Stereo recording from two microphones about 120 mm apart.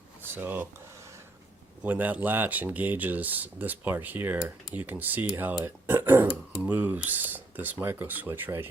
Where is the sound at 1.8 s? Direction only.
15° right (ahead or behind).